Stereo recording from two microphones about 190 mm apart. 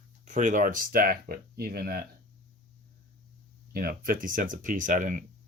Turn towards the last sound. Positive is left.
turn(degrees=-40)  # may be behind; listen again after turning